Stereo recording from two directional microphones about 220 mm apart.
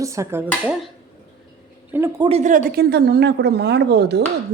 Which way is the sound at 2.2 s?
30° right (ahead or behind).